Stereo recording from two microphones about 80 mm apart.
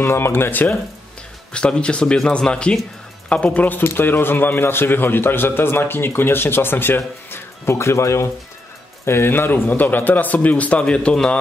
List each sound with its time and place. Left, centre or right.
0.0 s speech: left
1.5 s speech: centre